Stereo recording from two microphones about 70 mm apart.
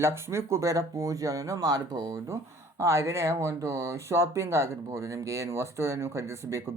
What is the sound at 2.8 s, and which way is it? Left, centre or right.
Speech, right.